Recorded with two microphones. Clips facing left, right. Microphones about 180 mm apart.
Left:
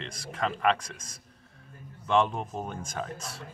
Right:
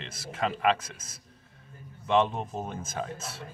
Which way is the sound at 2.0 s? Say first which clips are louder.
Even; 25° right (ahead or behind).